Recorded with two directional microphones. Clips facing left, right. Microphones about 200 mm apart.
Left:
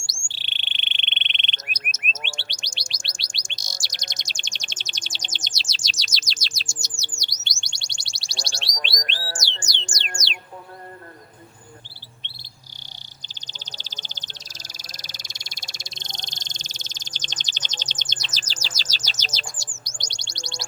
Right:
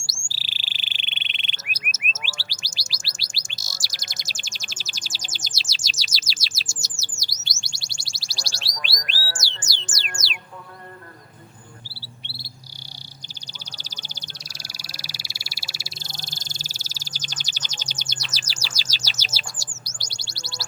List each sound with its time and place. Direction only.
0.0 s frog: 5° right (ahead or behind)
2.5 s bird: 5° right (ahead or behind)
5.9 s chirp: 5° right (ahead or behind)
9.1 s music: 25° left (ahead or behind)
9.7 s music: 5° right (ahead or behind)
13.7 s frog: 10° right (ahead or behind)
19.8 s bird: 5° right (ahead or behind)